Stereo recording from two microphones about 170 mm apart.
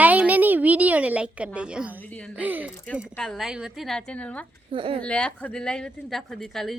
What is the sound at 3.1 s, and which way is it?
Speech, 5° left (ahead or behind).